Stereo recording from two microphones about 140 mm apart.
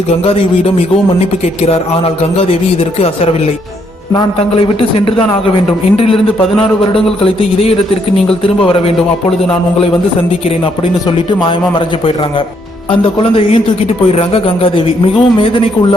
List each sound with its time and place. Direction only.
0.3 s a man's voice: 45° left (ahead or behind)
4.8 s a man's voice: 40° left (ahead or behind)
6.6 s a man's voice: 40° left (ahead or behind)
12.9 s a man's voice: 40° left (ahead or behind)